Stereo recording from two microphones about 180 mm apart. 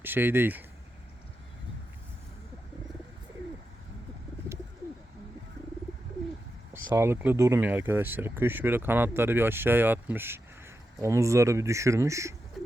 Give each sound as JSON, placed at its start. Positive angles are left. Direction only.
{"t": 0.0, "sound": "speech", "side_deg": -10}
{"t": 6.9, "sound": "speech", "side_deg": -15}